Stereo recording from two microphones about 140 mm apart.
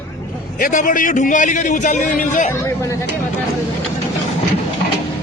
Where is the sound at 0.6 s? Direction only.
70° left (ahead or behind).